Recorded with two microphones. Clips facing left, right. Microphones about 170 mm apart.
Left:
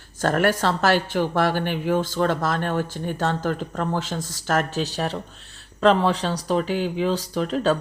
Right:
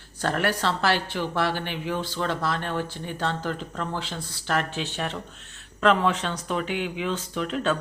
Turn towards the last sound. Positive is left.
turn(degrees=35)  # may be behind; listen again after turning